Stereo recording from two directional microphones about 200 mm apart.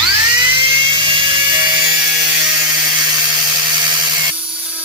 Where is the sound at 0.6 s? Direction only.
25° right (ahead or behind).